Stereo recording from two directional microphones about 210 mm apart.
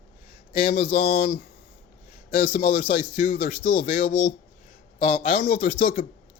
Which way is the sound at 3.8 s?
45° left (ahead or behind).